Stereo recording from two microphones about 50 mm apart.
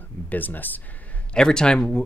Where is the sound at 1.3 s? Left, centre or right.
Centre.